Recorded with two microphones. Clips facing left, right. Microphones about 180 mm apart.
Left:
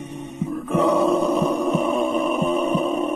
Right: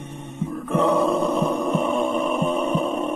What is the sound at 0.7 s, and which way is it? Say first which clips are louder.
Grunt: left 1 dB; 35° left (ahead or behind).